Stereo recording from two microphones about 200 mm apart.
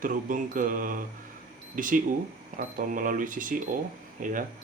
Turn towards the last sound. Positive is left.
turn(degrees=-40)  # may be behind; listen again after turning